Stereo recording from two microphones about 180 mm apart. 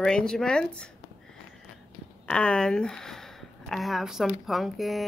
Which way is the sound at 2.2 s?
5° left (ahead or behind).